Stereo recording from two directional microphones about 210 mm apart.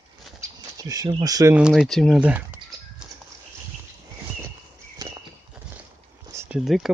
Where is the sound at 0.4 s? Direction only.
15° right (ahead or behind).